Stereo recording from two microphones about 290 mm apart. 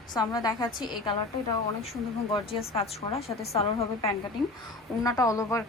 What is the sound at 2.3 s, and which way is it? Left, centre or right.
Speech, centre.